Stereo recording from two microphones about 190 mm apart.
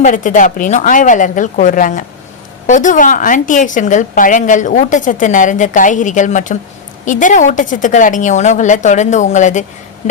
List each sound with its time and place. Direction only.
0.0 s a woman's voice: 45° left (ahead or behind)